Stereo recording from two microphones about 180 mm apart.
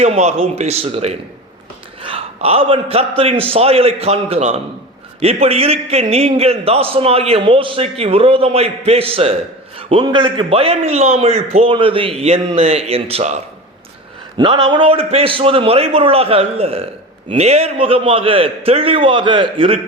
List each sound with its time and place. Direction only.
0.0 s a man's voice: 40° right (ahead or behind)